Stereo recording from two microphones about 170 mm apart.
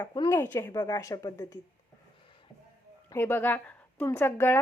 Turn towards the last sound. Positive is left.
turn(degrees=15)  # may be behind; listen again after turning